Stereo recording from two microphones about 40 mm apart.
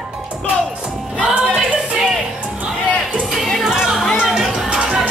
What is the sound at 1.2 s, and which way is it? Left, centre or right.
Music, right.